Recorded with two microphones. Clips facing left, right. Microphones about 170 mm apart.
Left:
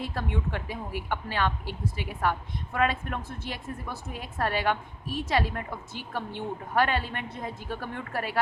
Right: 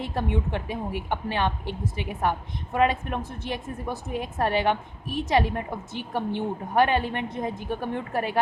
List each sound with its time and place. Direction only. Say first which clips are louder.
0.0 s a woman's voice: right 4 dB; 20° right (ahead or behind)